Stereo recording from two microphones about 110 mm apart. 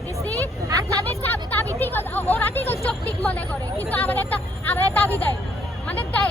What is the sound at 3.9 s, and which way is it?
A woman's voice, 15° left (ahead or behind).